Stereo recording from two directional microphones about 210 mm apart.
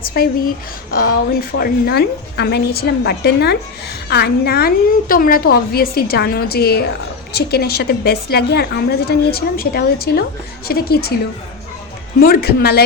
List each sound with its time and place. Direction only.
0.0 s speech: 45° left (ahead or behind)
1.3 s a woman's voice: 45° left (ahead or behind)
12.2 s a woman's voice: 45° left (ahead or behind)